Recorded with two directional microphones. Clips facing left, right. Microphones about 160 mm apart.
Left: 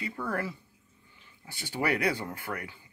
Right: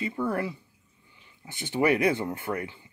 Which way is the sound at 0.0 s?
20° right (ahead or behind).